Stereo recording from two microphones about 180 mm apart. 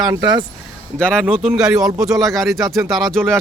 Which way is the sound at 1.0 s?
5° left (ahead or behind).